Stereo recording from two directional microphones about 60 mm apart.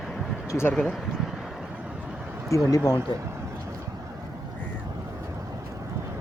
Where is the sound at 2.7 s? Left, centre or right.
Left.